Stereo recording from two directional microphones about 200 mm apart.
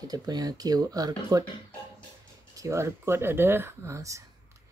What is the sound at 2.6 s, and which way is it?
Speech, 15° right (ahead or behind).